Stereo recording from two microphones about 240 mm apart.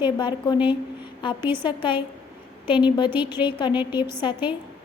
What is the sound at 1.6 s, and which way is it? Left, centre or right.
A woman's voice, left.